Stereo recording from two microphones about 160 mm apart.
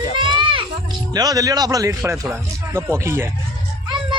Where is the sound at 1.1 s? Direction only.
25° right (ahead or behind).